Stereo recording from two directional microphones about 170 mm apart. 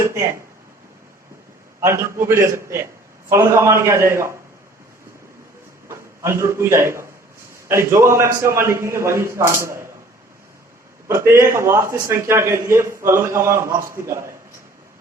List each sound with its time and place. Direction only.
1.8 s a man's voice: 15° right (ahead or behind)
5.9 s a man's voice: 15° right (ahead or behind)
11.1 s a man's voice: 15° right (ahead or behind)